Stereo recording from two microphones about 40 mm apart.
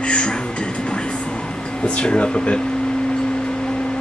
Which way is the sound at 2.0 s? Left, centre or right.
Left.